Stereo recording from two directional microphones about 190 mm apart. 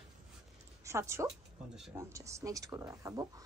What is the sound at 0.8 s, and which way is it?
Speech, 15° right (ahead or behind).